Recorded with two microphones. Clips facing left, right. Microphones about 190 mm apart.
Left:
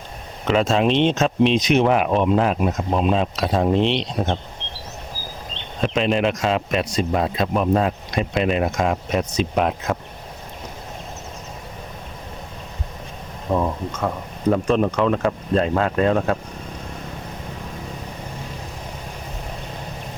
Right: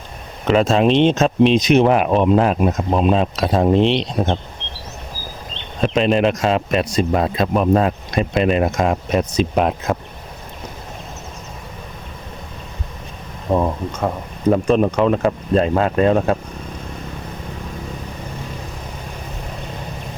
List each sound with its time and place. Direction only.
0.4 s speech: 40° right (ahead or behind)
5.8 s speech: 40° right (ahead or behind)
13.5 s speech: 35° right (ahead or behind)
14.7 s speech: 20° right (ahead or behind)